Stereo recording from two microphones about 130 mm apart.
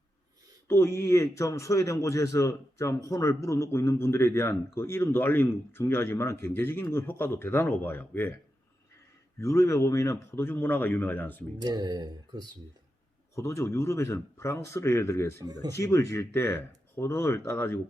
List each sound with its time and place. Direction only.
0.7 s a man's voice: 20° left (ahead or behind)
9.4 s speech: 25° left (ahead or behind)
11.6 s speech: 30° right (ahead or behind)
13.3 s a man's voice: 20° left (ahead or behind)
15.4 s speech: 30° right (ahead or behind)
15.7 s a man's voice: 25° left (ahead or behind)